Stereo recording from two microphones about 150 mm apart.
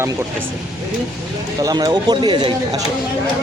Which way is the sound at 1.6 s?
25° right (ahead or behind).